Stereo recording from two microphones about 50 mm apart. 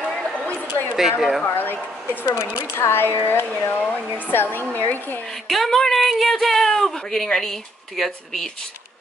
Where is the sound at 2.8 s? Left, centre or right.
Left.